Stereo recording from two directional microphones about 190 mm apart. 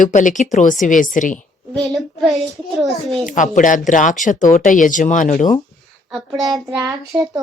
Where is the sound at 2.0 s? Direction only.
Centre (ahead or behind).